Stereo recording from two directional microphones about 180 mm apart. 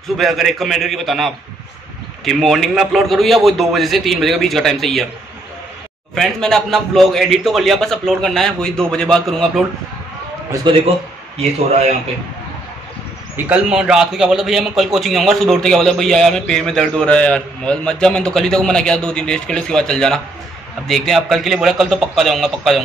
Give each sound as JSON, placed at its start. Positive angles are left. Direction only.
{"t": 0.2, "sound": "a man's voice", "side_deg": 0}
{"t": 6.1, "sound": "a man's voice", "side_deg": 0}
{"t": 10.5, "sound": "a man's voice", "side_deg": -25}
{"t": 11.3, "sound": "a man's voice", "side_deg": -35}
{"t": 13.5, "sound": "a man's voice", "side_deg": -5}